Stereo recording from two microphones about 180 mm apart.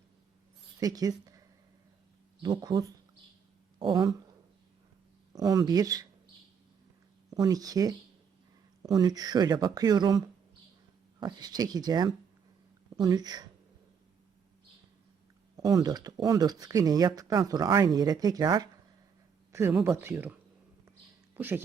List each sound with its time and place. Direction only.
0.8 s speech: 20° right (ahead or behind)
5.3 s speech: 20° right (ahead or behind)
7.3 s speech: 20° right (ahead or behind)
15.5 s speech: 20° right (ahead or behind)
19.8 s speech: 15° right (ahead or behind)
21.3 s speech: 10° right (ahead or behind)